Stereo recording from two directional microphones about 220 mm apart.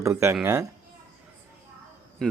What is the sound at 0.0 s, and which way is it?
Speech, 10° right (ahead or behind).